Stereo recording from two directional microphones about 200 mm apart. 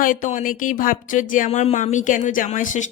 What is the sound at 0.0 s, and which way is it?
Speech, 40° left (ahead or behind).